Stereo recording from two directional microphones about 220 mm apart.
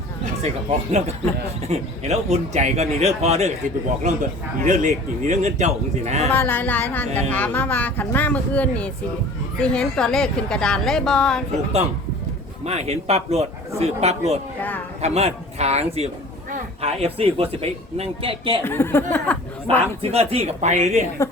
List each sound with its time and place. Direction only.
0.4 s speech: 30° right (ahead or behind)
4.6 s speech: 35° right (ahead or behind)
6.3 s a woman's voice: 10° left (ahead or behind)
12.6 s speech: 30° right (ahead or behind)
18.6 s speech: 10° left (ahead or behind)
20.0 s speech: 25° right (ahead or behind)
21.2 s speech: 15° left (ahead or behind)